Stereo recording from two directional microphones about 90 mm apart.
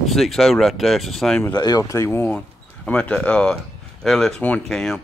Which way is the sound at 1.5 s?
50° left (ahead or behind).